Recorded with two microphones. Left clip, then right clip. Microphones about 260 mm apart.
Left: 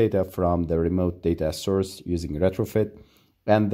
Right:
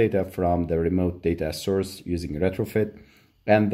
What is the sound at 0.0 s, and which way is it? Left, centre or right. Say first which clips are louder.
Speech: even; left.